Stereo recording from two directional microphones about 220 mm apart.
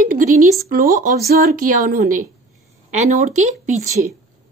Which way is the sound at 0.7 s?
40° right (ahead or behind).